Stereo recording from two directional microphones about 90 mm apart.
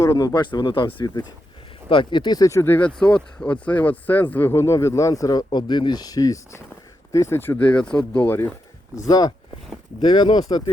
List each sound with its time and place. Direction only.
0.0 s speech: 40° left (ahead or behind)
2.5 s speech: 25° left (ahead or behind); by 5.5 s 40° left (ahead or behind)
5.5 s speech: 55° left (ahead or behind); by 8.4 s 20° left (ahead or behind)
9.0 s speech: 50° left (ahead or behind)
10.0 s speech: 60° left (ahead or behind)